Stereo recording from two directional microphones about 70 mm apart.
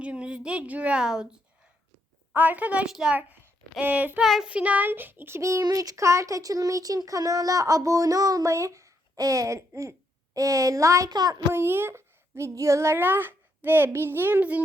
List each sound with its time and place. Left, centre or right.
0.0 s a woman's voice: centre
2.3 s speech: right
4.2 s child singing: centre
4.4 s speech: right
5.6 s speech: right
6.0 s a child's voice: right
11.1 s a child's voice: right
11.5 s speech: right
13.0 s a child's voice: right